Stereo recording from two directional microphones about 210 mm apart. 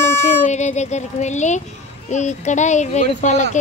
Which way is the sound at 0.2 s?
35° left (ahead or behind).